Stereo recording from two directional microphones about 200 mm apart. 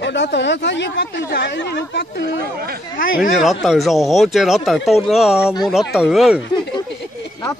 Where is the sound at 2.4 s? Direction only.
50° right (ahead or behind).